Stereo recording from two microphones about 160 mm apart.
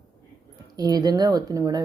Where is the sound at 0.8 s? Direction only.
25° right (ahead or behind).